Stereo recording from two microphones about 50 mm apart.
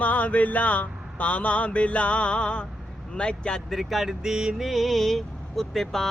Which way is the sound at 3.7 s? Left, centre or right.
Centre.